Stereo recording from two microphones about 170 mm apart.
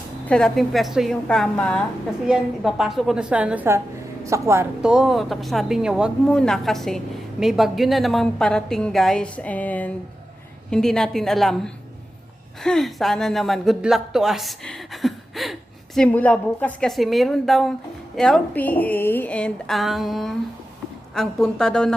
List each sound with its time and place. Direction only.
0.3 s a woman's voice: 5° left (ahead or behind); by 4.6 s 15° right (ahead or behind)
4.8 s a woman's voice: 5° right (ahead or behind)